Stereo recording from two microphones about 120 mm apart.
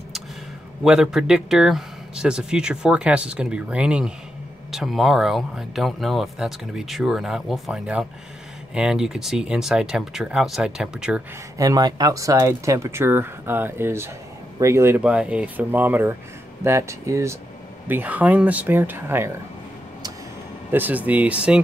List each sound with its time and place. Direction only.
0.8 s speech: 5° right (ahead or behind)
11.5 s speech: 30° right (ahead or behind)
15.0 s speech: 10° right (ahead or behind)
20.7 s speech: 15° right (ahead or behind)